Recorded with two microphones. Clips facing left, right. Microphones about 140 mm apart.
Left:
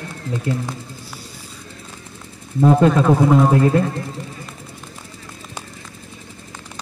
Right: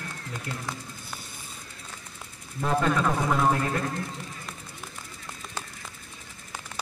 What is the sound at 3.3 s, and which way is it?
Speech, 30° left (ahead or behind).